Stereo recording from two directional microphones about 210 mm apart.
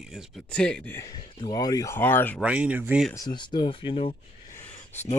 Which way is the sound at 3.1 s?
20° left (ahead or behind).